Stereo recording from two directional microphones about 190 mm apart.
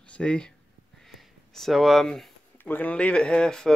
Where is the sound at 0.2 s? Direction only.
5° left (ahead or behind).